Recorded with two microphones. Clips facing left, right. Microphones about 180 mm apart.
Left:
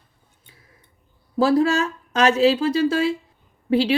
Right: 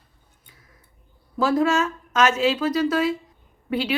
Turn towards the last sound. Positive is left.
turn(degrees=30)  # may be behind; listen again after turning